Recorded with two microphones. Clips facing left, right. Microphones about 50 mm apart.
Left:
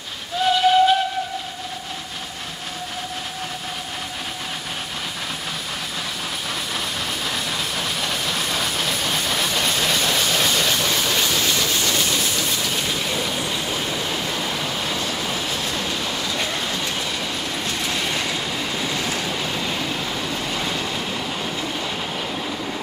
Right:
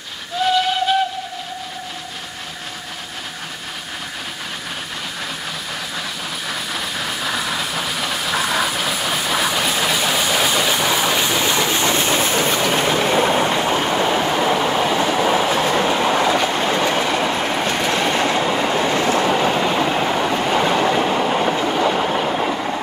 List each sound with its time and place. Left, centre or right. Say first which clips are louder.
0.4 s whistle: right 1 dB; centre
6.5 s train: right 3 dB; centre; by 16.7 s right
16.7 s train: right 8 dB; right
22.2 s train: right 7 dB; right